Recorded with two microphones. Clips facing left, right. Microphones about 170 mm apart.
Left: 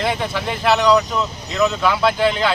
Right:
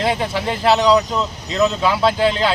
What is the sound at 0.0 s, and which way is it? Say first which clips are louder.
Speech: right 2 dB; 35° right (ahead or behind).